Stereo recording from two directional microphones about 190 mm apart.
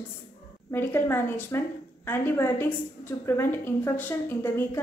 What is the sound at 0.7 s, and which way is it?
A woman's voice, 10° left (ahead or behind).